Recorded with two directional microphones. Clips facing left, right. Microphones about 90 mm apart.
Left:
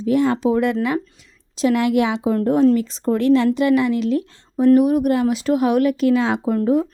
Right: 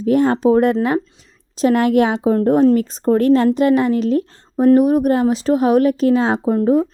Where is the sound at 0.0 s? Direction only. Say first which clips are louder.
Right 3 dB; 45° right (ahead or behind).